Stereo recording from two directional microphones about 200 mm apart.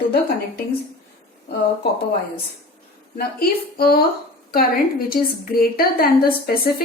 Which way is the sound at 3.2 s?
50° left (ahead or behind).